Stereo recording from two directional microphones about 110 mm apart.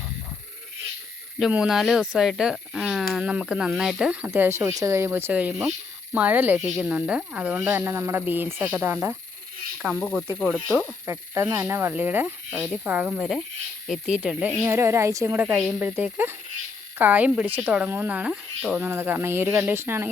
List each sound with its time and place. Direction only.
1.4 s speech: 10° right (ahead or behind)
4.3 s speech: 25° right (ahead or behind)
9.8 s speech: 5° left (ahead or behind)
10.4 s speech: 5° right (ahead or behind)
11.0 s speech: 20° right (ahead or behind)
13.8 s speech: centre (ahead or behind)
14.6 s speech: 25° right (ahead or behind); by 18.8 s 5° right (ahead or behind)
18.8 s speech: 20° right (ahead or behind)